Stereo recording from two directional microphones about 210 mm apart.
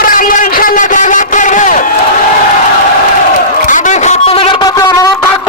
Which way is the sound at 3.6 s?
35° left (ahead or behind).